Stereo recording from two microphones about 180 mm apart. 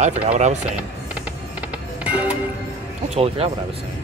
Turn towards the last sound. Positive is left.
turn(degrees=-35)  # may be behind; listen again after turning